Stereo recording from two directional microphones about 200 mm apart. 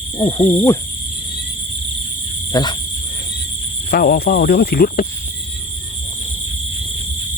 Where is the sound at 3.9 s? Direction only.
50° left (ahead or behind).